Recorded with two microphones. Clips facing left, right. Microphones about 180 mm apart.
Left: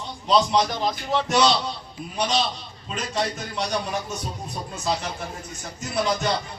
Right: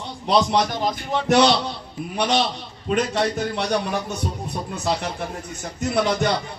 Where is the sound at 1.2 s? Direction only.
60° right (ahead or behind).